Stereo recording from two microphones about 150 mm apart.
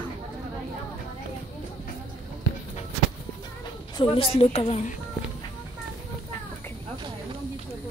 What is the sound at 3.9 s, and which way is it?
Speech, 35° left (ahead or behind).